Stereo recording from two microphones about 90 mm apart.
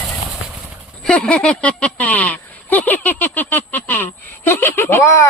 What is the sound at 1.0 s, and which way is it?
Speech, 10° left (ahead or behind).